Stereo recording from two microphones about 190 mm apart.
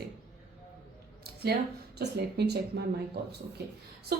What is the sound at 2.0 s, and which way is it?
Speech, 60° right (ahead or behind).